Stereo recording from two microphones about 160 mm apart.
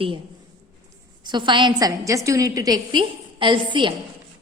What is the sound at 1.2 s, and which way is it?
A woman's voice, 30° right (ahead or behind).